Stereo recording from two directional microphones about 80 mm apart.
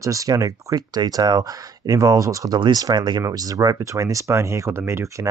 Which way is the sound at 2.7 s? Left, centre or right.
Right.